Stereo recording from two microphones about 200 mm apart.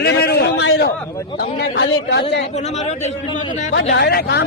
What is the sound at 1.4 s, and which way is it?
Speech, 50° left (ahead or behind).